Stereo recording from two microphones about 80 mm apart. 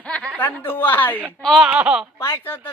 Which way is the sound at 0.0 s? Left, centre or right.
Centre.